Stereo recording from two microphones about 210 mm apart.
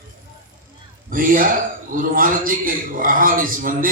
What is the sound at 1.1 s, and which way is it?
A man's voice, 40° right (ahead or behind).